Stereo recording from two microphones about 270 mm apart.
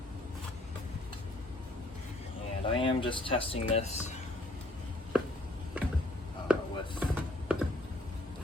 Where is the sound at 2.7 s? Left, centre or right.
Centre.